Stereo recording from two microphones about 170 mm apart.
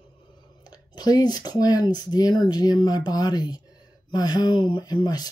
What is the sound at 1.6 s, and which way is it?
Speech, 20° left (ahead or behind).